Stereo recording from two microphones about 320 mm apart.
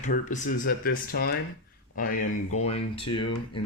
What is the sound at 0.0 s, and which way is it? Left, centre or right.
Speech, left.